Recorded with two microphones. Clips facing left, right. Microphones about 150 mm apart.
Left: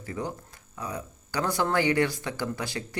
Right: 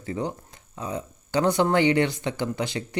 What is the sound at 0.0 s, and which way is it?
Speech, 25° right (ahead or behind).